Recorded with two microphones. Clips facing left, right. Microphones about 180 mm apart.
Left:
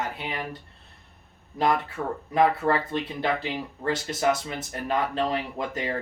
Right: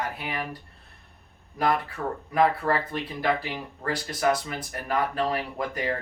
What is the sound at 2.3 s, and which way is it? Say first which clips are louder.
Speech: left 1 dB; 25° left (ahead or behind).